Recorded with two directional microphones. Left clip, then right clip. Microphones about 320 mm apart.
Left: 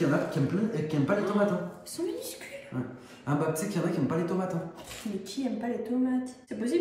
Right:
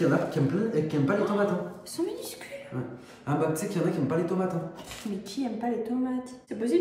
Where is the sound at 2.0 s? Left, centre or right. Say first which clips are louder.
Right 2 dB; centre.